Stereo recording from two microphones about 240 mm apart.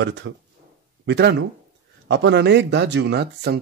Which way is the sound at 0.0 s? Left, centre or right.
Right.